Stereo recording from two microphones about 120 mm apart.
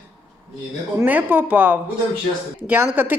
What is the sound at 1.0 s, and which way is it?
A woman's voice, 15° right (ahead or behind).